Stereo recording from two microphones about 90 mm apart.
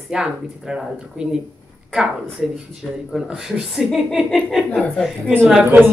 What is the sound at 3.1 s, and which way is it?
Speech, 5° right (ahead or behind).